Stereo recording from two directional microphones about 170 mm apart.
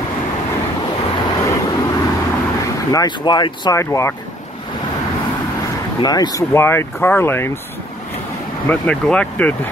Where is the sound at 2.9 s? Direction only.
25° left (ahead or behind).